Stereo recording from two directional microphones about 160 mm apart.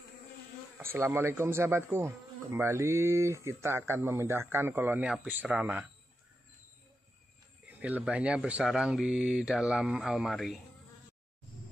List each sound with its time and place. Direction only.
0.7 s a man's voice: 15° right (ahead or behind)
7.6 s speech: 10° right (ahead or behind)